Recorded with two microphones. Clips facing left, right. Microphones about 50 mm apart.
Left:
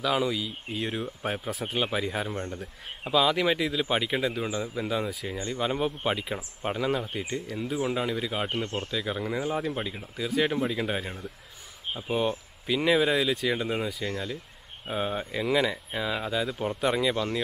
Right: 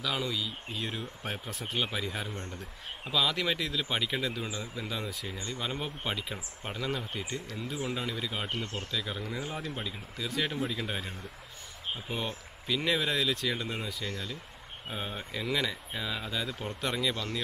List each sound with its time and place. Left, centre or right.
0.0 s speech: centre